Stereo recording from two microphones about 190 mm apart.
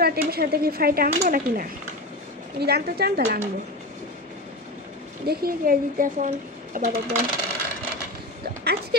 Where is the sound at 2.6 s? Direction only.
55° right (ahead or behind).